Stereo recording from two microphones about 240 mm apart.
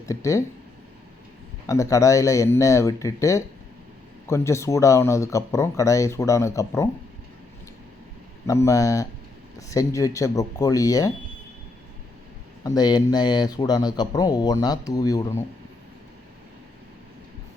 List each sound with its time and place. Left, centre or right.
0.0 s speech: centre
1.6 s speech: centre
8.4 s speech: centre
12.6 s speech: centre